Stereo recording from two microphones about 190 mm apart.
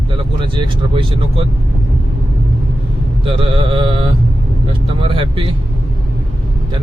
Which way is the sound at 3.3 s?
30° right (ahead or behind).